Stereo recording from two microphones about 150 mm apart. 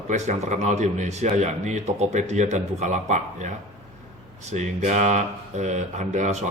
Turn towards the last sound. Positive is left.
turn(degrees=-55)  # may be behind; listen again after turning